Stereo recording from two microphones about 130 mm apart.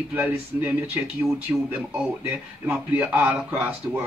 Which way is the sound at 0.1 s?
15° right (ahead or behind).